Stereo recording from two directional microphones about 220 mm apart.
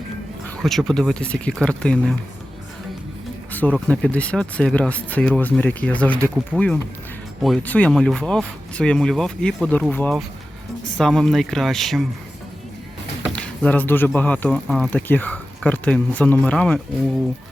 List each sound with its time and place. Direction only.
0.4 s speech: 5° left (ahead or behind)
3.5 s speech: 5° left (ahead or behind)
6.1 s speech: 10° right (ahead or behind)
7.4 s speech: 5° left (ahead or behind)
13.3 s speech: 5° left (ahead or behind)